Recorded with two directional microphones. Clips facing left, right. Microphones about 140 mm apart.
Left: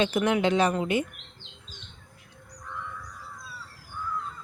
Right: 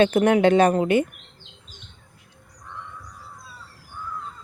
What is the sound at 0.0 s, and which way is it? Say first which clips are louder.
Speech: right 7 dB; 55° right (ahead or behind).